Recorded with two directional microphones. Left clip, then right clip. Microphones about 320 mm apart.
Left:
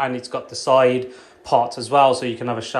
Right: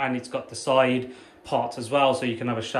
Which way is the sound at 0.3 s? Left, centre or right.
Centre.